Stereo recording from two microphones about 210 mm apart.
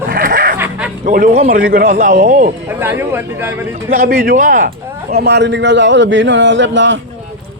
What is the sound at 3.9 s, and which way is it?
Speech, 45° right (ahead or behind).